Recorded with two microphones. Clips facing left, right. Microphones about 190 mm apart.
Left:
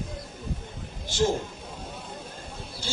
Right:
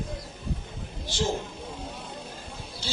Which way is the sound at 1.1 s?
50° left (ahead or behind).